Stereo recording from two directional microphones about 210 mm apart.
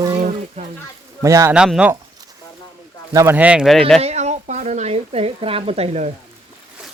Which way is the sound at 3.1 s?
15° right (ahead or behind).